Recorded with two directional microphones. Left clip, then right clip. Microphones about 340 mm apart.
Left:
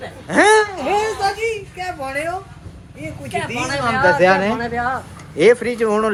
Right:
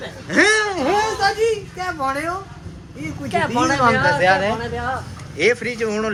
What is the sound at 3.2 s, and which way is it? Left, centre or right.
Speech, right.